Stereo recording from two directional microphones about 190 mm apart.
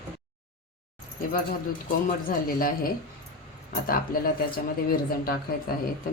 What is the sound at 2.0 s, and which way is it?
Speech, 50° left (ahead or behind).